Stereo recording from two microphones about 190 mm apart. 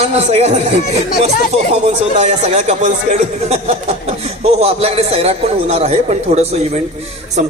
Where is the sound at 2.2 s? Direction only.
35° right (ahead or behind).